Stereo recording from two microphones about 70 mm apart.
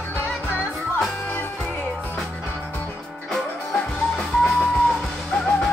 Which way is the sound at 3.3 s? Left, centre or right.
Centre.